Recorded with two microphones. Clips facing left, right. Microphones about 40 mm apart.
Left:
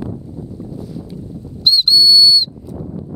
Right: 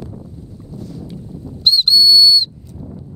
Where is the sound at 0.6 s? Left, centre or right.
Centre.